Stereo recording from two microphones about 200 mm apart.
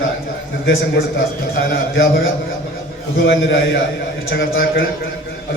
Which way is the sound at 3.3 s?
65° left (ahead or behind).